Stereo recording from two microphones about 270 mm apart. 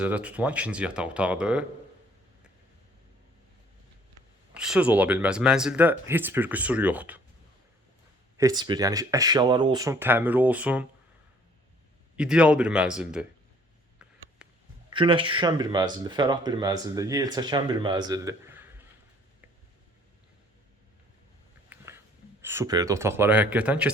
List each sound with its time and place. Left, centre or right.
0.0 s speech: centre
4.5 s speech: centre
8.4 s speech: centre
12.1 s speech: centre
14.4 s a sound: centre
14.8 s speech: centre
22.4 s speech: centre